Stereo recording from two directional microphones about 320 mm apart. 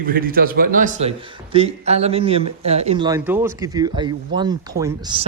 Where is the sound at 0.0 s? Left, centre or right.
Right.